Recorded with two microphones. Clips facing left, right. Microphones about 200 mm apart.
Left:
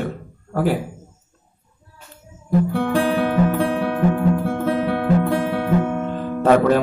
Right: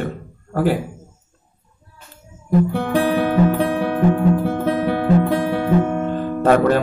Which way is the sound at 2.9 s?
15° right (ahead or behind).